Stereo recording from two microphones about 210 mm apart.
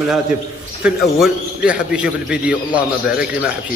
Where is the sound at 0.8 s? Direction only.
5° right (ahead or behind).